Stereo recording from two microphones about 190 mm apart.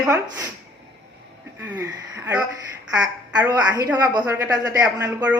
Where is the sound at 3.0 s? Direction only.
15° right (ahead or behind).